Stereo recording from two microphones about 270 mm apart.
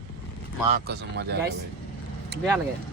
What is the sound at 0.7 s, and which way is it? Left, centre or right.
Speech, right.